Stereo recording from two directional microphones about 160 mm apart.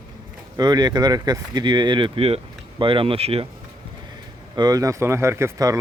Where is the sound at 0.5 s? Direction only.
25° right (ahead or behind).